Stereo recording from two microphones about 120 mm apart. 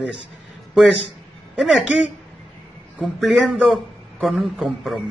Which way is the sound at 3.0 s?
10° right (ahead or behind).